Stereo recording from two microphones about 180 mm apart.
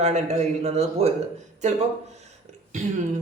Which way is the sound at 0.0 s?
40° right (ahead or behind).